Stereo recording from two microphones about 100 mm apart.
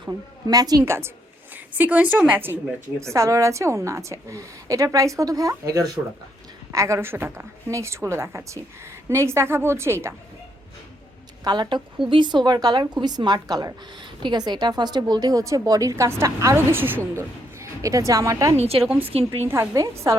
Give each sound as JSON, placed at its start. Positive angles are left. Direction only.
{"t": 0.4, "sound": "a woman's voice", "side_deg": -40}
{"t": 0.9, "sound": "a woman's voice", "side_deg": -25}
{"t": 3.0, "sound": "a woman's voice", "side_deg": -30}
{"t": 11.4, "sound": "a woman's voice", "side_deg": -45}
{"t": 18.5, "sound": "a woman's voice", "side_deg": -90}
{"t": 19.0, "sound": "a woman's voice", "side_deg": -70}
{"t": 19.5, "sound": "a woman's voice", "side_deg": -30}